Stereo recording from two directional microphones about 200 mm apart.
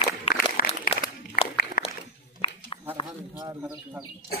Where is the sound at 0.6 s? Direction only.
45° left (ahead or behind).